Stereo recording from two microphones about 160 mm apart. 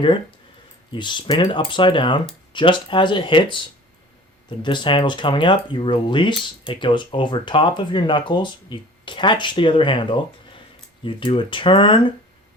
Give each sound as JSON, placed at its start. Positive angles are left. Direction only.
{"t": 0.9, "sound": "speech", "side_deg": 30}